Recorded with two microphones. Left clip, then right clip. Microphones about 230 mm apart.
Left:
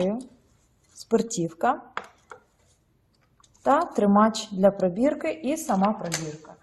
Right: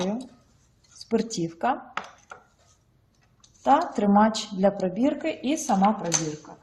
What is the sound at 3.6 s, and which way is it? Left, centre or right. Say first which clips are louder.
A woman's voice: even; centre.